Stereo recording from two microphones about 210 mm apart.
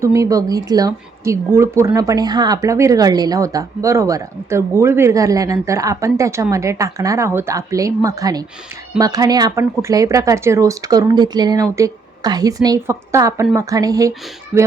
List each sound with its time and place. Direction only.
0.0 s speech: 15° right (ahead or behind)